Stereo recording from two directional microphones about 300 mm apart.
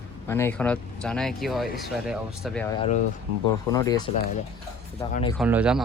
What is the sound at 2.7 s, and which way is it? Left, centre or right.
Speech, left.